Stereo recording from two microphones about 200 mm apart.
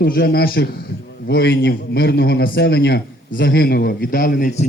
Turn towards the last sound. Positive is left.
turn(degrees=45)  # may be behind; listen again after turning